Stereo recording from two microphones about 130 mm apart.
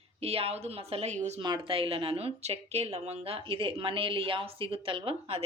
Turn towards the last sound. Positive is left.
turn(degrees=-45)  # may be behind; listen again after turning